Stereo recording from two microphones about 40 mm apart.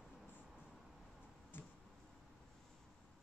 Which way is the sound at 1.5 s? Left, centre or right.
Left.